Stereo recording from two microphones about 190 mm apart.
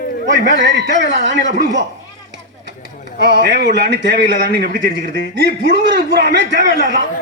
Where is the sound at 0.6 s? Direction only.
70° right (ahead or behind).